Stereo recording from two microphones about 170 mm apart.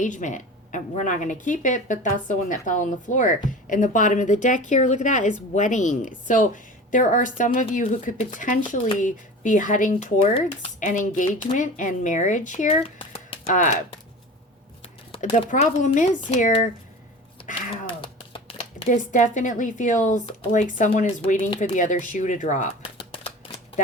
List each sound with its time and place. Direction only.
0.0 s speech: 45° left (ahead or behind)
13.0 s a sound: 30° left (ahead or behind)
13.5 s speech: 50° left (ahead or behind)
15.4 s speech: 45° left (ahead or behind)
17.8 s a sound: 30° left (ahead or behind)
19.1 s speech: 45° left (ahead or behind)
22.8 s typewriter: 35° left (ahead or behind)